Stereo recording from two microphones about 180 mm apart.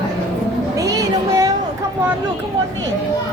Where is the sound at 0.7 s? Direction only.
20° right (ahead or behind).